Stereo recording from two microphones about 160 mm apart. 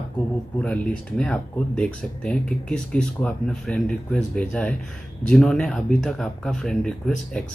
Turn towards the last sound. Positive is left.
turn(degrees=5)  # may be behind; listen again after turning